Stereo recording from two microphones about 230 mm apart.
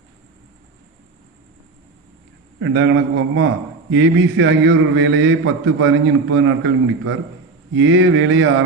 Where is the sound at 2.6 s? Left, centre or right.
Right.